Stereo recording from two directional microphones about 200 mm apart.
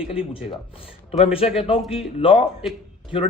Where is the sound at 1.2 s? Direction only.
30° left (ahead or behind).